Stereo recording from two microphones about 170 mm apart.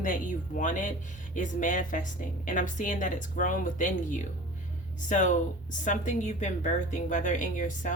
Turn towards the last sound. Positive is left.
turn(degrees=50)  # may be behind; listen again after turning